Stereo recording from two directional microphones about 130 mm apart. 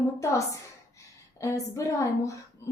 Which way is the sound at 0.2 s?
25° left (ahead or behind).